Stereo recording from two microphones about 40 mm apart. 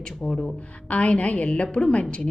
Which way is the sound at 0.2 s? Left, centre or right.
Centre.